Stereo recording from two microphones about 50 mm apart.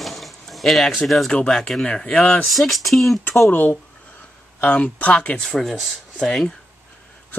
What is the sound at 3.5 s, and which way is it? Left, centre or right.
Speech, left.